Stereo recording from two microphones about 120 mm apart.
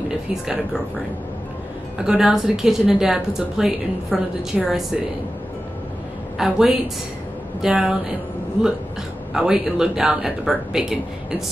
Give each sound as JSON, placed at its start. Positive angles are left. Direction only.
{"t": 2.0, "sound": "a woman's voice", "side_deg": -5}
{"t": 6.3, "sound": "a woman's voice", "side_deg": -5}
{"t": 9.3, "sound": "a woman's voice", "side_deg": -5}